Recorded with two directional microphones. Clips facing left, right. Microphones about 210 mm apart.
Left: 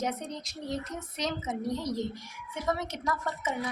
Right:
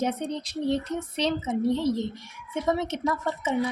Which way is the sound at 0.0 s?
30° right (ahead or behind).